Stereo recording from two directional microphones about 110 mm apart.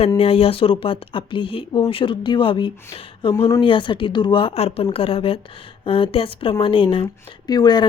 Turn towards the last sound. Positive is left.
turn(degrees=40)  # may be behind; listen again after turning